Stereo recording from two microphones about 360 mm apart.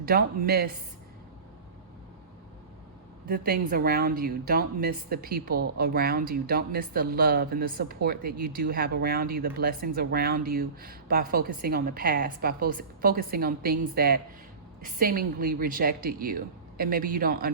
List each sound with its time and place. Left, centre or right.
0.0 s a woman's voice: right
3.2 s a woman's voice: right